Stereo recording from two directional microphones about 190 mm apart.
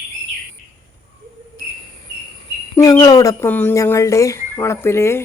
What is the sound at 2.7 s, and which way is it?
Speech, 20° left (ahead or behind).